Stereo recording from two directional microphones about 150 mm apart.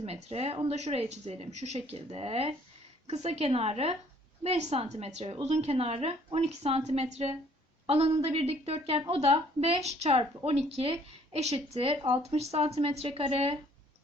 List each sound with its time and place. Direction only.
0.0 s a woman's voice: 45° right (ahead or behind)